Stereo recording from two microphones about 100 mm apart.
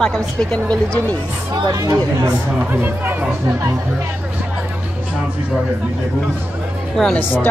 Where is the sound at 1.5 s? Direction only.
35° right (ahead or behind).